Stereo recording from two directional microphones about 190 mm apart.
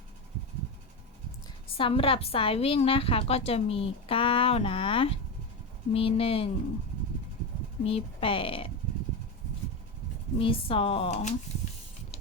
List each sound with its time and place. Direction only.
1.7 s a woman's voice: 30° left (ahead or behind)
7.9 s a woman's voice: 30° left (ahead or behind)
10.3 s a woman's voice: 30° left (ahead or behind)